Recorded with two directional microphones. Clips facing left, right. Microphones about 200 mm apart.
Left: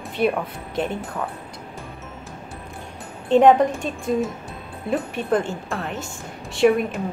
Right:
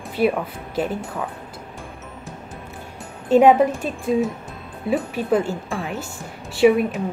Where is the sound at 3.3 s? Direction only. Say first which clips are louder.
Right 1 dB; 5° right (ahead or behind).